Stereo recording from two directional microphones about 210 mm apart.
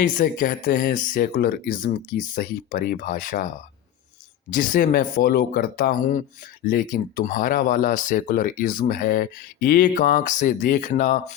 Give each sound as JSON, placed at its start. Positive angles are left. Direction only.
{"t": 0.0, "sound": "speech", "side_deg": 40}
{"t": 4.5, "sound": "speech", "side_deg": 40}